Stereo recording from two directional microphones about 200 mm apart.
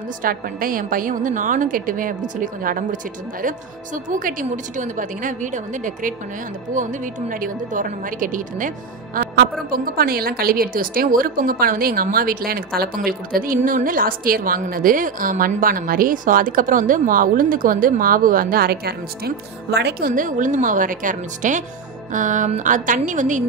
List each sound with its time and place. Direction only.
0.2 s a woman's voice: 45° right (ahead or behind)